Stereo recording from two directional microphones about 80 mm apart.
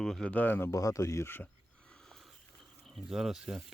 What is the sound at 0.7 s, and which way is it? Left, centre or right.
Speech, left.